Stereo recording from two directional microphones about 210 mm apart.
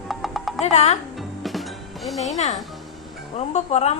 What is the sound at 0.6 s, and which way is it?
Speech, 30° left (ahead or behind).